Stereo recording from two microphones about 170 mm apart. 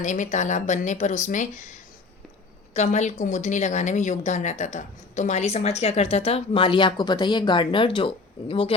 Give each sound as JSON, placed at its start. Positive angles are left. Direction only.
{"t": 0.0, "sound": "speech", "side_deg": 45}
{"t": 2.7, "sound": "a woman's voice", "side_deg": 40}